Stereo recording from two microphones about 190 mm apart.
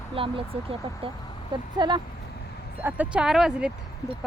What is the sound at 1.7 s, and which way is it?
Speech, 25° right (ahead or behind).